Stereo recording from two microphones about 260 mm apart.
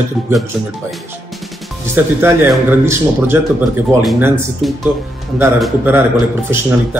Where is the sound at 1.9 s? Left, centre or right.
Centre.